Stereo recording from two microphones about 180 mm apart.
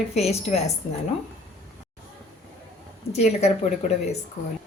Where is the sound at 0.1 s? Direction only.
35° left (ahead or behind).